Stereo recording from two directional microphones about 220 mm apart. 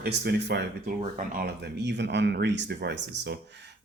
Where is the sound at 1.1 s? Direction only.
40° right (ahead or behind).